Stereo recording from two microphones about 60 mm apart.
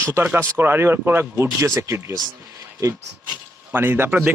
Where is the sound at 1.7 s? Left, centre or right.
Right.